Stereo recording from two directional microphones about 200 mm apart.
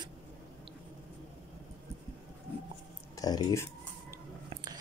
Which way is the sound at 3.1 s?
20° left (ahead or behind).